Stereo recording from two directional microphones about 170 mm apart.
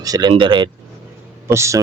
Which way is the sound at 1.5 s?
15° right (ahead or behind).